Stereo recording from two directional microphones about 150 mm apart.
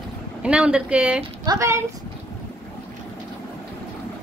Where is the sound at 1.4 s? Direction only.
20° right (ahead or behind).